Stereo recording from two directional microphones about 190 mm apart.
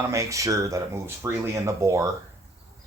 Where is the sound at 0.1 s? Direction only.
15° right (ahead or behind).